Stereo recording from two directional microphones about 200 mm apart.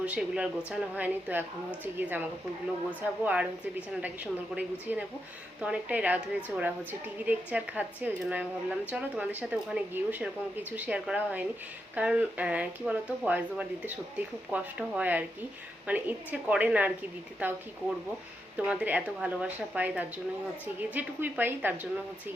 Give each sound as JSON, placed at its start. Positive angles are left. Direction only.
{"t": 0.0, "sound": "a woman's voice", "side_deg": -5}
{"t": 3.2, "sound": "a woman's voice", "side_deg": -5}